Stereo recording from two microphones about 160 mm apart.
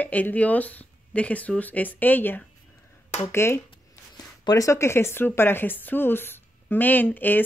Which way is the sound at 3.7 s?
25° left (ahead or behind).